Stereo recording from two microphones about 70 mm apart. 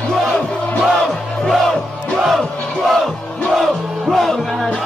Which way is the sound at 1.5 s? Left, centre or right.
Centre.